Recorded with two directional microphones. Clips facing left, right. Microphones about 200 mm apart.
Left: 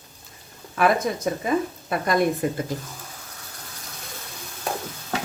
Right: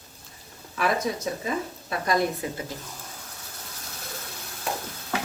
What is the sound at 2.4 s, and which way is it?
Speech, 50° left (ahead or behind).